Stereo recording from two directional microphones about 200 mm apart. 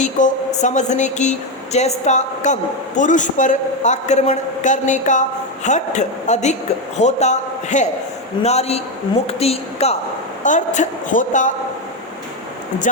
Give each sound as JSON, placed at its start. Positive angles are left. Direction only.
{"t": 0.0, "sound": "speech", "side_deg": 35}